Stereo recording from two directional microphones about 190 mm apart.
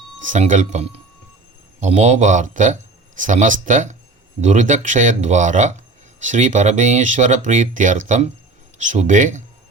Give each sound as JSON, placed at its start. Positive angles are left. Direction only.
{"t": 0.3, "sound": "speech", "side_deg": -40}